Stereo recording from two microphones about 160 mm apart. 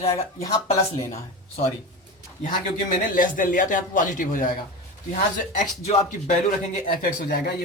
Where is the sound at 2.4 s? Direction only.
55° left (ahead or behind).